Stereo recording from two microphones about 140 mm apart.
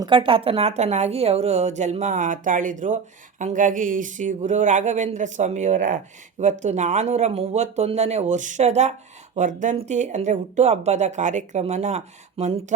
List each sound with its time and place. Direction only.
0.0 s a woman's voice: 35° right (ahead or behind); by 12.7 s 55° right (ahead or behind)